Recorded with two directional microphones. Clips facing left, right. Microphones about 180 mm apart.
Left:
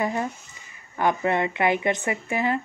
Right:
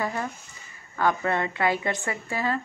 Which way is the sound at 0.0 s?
20° left (ahead or behind).